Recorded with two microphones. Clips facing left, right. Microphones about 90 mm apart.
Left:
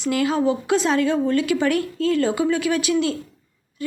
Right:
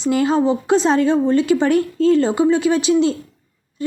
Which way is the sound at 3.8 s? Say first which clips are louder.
Right 6 dB; 30° right (ahead or behind).